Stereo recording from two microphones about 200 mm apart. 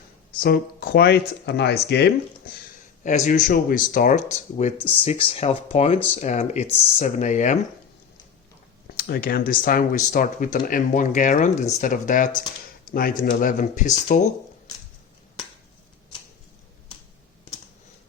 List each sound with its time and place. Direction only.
0.3 s speech: 50° left (ahead or behind)
3.2 s speech: 40° left (ahead or behind)
9.0 s speech: 50° left (ahead or behind)